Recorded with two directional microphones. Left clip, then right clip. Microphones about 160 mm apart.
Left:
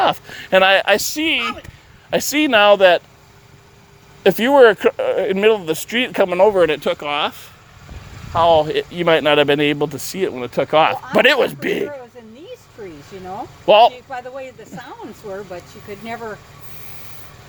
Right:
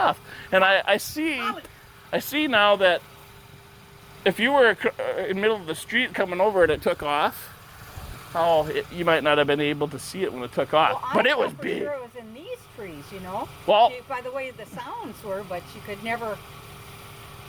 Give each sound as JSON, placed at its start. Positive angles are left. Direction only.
{"t": 0.0, "sound": "speech", "side_deg": 75}
{"t": 1.1, "sound": "speech", "side_deg": 45}
{"t": 2.0, "sound": "speech", "side_deg": 60}
{"t": 4.2, "sound": "speech", "side_deg": 75}
{"t": 6.7, "sound": "speech", "side_deg": 30}
{"t": 6.9, "sound": "speech", "side_deg": 10}
{"t": 8.3, "sound": "speech", "side_deg": 20}
{"t": 8.5, "sound": "speech", "side_deg": 50}
{"t": 13.7, "sound": "speech", "side_deg": 75}